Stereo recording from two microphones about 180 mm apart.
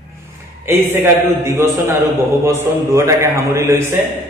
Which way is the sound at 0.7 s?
15° right (ahead or behind).